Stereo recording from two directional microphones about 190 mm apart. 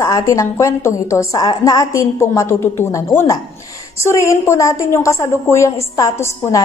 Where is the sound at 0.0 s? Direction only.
15° left (ahead or behind).